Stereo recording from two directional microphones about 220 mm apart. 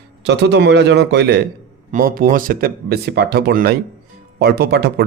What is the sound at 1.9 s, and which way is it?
Speech, 40° right (ahead or behind).